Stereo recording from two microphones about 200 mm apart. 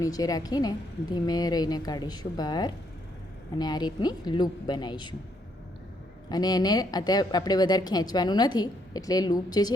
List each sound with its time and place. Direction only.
0.0 s speech: 20° left (ahead or behind)
6.2 s speech: 20° left (ahead or behind)